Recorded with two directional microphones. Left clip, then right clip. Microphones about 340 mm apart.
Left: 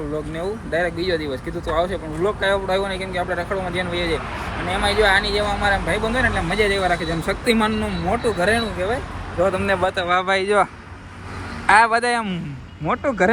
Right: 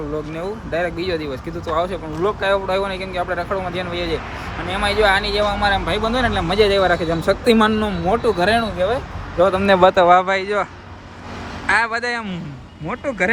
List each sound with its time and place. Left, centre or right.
0.3 s speech: centre
9.4 s speech: centre
10.1 s speech: centre